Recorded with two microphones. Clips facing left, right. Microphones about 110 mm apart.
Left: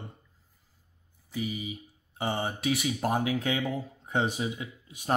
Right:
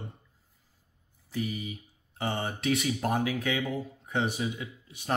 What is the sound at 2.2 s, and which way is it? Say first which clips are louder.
Speech: left 1 dB; 25° left (ahead or behind).